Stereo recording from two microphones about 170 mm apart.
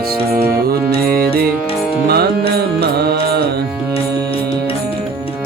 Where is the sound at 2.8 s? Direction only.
70° right (ahead or behind).